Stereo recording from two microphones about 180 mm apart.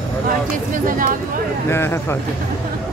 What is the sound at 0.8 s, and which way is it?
Speech, 50° right (ahead or behind).